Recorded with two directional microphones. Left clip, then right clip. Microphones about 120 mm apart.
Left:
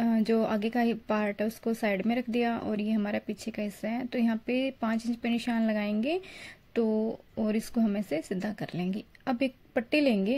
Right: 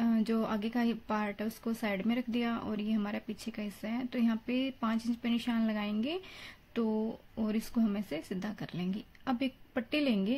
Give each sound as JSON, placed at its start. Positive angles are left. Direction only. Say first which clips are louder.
{"t": 0.0, "sound": "speech", "louder": "left 5 dB", "side_deg": 45}